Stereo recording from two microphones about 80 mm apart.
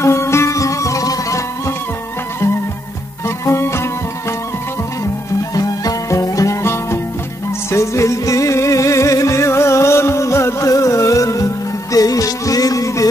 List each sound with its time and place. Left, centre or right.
0.0 s music: left
3.3 s music: left
5.5 s music: left